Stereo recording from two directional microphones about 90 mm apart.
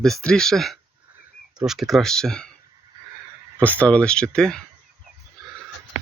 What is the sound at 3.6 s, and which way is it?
Speech, 15° left (ahead or behind).